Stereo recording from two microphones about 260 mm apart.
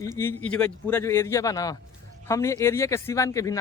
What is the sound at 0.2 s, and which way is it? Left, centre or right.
Speech, centre.